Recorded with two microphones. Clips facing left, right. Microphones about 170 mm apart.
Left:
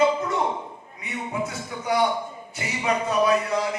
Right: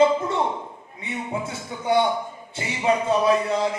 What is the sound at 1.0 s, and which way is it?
A man's voice, 25° right (ahead or behind).